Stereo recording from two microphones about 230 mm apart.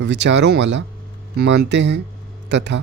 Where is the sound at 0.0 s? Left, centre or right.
Right.